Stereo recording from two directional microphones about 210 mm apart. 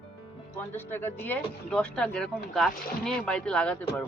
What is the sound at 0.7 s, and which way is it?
A woman's voice, 10° left (ahead or behind).